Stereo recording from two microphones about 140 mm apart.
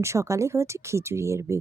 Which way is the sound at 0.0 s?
20° right (ahead or behind).